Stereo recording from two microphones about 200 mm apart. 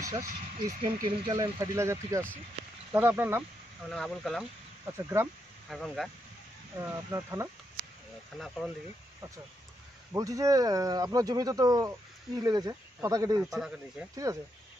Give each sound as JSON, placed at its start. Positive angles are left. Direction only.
{"t": 0.0, "sound": "speech", "side_deg": -15}
{"t": 1.4, "sound": "speech", "side_deg": -15}
{"t": 3.9, "sound": "speech", "side_deg": 5}
{"t": 4.8, "sound": "speech", "side_deg": -10}
{"t": 5.7, "sound": "speech", "side_deg": 0}
{"t": 6.8, "sound": "speech", "side_deg": -15}
{"t": 10.1, "sound": "speech", "side_deg": -15}
{"t": 13.4, "sound": "speech", "side_deg": 0}
{"t": 14.1, "sound": "speech", "side_deg": -15}